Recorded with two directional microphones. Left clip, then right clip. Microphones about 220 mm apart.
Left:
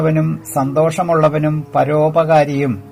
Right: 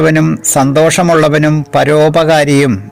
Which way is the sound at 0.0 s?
45° right (ahead or behind).